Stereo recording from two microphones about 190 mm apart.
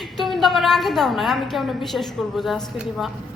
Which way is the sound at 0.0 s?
Centre (ahead or behind).